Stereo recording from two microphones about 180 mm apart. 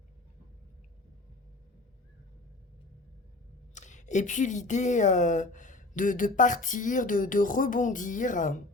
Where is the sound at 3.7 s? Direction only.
40° left (ahead or behind).